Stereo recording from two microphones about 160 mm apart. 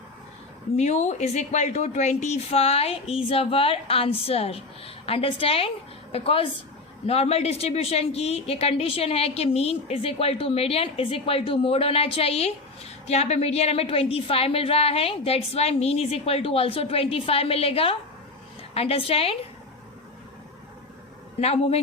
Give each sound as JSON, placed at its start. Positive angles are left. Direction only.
{"t": 0.8, "sound": "a woman's voice", "side_deg": 45}
{"t": 21.4, "sound": "a woman's voice", "side_deg": 40}